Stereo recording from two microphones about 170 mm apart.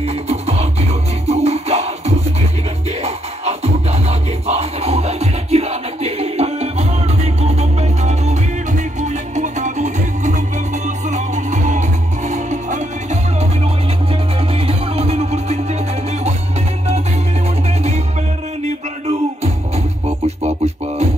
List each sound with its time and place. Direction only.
0.0 s music: 40° right (ahead or behind)
14.5 s music: 35° right (ahead or behind)
20.1 s music: 40° right (ahead or behind)